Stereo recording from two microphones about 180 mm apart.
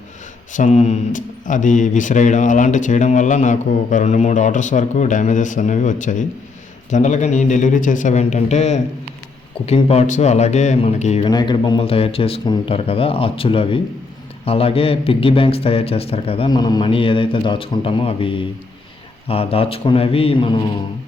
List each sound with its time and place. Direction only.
0.5 s a man's voice: 40° left (ahead or behind)
11.3 s a man's voice: 25° left (ahead or behind)